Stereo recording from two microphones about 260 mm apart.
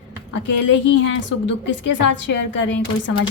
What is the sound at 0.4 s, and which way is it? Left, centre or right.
A woman's voice, left.